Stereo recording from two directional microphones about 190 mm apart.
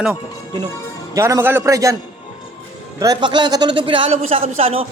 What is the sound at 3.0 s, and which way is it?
A man's voice, 20° right (ahead or behind).